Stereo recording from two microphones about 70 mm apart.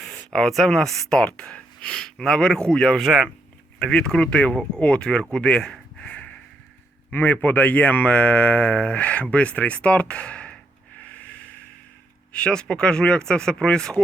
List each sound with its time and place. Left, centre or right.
0.0 s speech: centre
5.3 s a sound: centre
7.1 s speech: left